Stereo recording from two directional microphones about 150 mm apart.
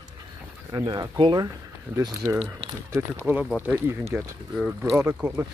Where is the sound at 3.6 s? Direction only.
15° right (ahead or behind).